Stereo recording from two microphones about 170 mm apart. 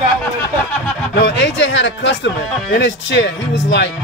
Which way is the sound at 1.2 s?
90° left.